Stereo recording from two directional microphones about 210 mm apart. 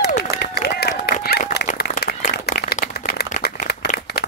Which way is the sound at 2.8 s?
50° left (ahead or behind).